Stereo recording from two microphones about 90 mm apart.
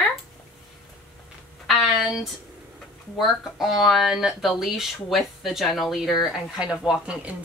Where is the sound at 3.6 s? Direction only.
Centre (ahead or behind).